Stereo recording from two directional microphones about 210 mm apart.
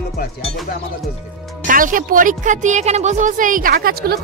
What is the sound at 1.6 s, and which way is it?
Speech, 40° right (ahead or behind).